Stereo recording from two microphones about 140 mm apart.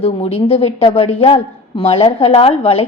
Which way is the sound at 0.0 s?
45° left (ahead or behind).